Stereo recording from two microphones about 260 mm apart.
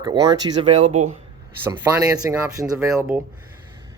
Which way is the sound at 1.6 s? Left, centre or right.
Centre.